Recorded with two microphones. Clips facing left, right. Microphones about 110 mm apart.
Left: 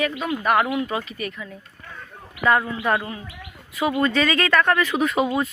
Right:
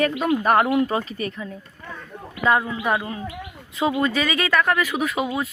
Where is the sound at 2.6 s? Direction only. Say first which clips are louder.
Even; 10° right (ahead or behind).